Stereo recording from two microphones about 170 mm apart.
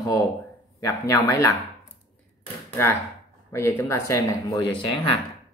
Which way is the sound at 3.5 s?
15° left (ahead or behind).